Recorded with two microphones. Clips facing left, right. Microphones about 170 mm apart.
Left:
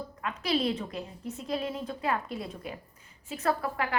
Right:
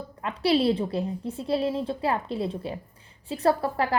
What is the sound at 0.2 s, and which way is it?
A woman's voice, 30° right (ahead or behind).